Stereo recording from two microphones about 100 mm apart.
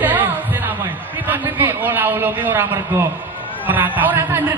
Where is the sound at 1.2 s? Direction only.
20° right (ahead or behind).